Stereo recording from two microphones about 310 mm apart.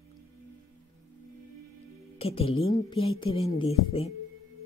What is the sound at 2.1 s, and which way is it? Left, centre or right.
Speech, centre.